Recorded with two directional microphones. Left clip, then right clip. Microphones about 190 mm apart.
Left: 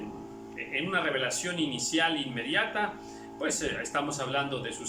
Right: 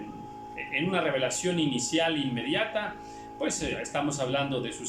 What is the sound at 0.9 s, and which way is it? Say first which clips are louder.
Speech: right 1 dB; 20° right (ahead or behind).